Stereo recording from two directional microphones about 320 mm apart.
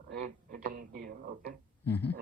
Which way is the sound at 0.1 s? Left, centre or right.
Right.